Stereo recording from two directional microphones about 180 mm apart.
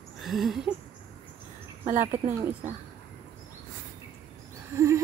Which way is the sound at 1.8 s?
45° right (ahead or behind).